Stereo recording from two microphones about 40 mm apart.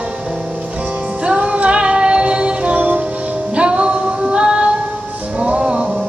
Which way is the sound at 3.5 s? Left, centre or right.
Right.